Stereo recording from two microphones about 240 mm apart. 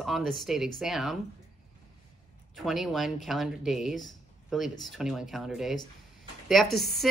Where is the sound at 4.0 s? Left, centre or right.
Centre.